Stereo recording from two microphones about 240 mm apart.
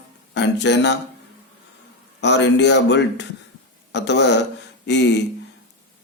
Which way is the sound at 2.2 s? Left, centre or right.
Left.